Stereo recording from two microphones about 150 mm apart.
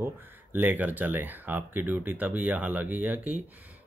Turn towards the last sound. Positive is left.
turn(degrees=-10)  # may be behind; listen again after turning